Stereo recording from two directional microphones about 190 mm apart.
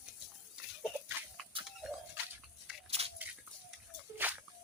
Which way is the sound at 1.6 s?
25° right (ahead or behind).